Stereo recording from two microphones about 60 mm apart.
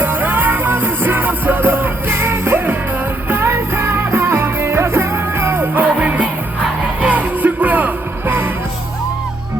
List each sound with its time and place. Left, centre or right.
0.0 s music: right